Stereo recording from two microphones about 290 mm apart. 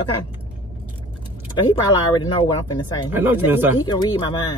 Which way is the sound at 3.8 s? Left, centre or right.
Centre.